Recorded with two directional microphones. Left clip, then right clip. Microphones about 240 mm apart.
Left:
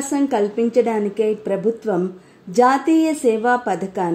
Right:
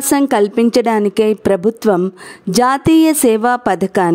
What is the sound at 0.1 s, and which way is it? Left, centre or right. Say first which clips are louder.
A woman's voice: right 7 dB; right.